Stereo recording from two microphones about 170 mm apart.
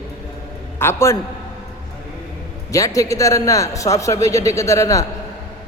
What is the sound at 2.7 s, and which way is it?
A man's voice, 20° left (ahead or behind).